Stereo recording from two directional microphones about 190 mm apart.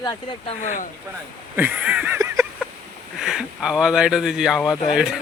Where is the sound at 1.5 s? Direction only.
10° right (ahead or behind).